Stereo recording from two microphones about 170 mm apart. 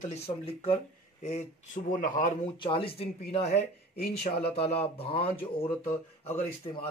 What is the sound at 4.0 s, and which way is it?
Speech, 65° left (ahead or behind).